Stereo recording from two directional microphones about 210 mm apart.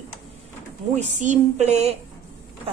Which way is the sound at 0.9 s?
35° right (ahead or behind).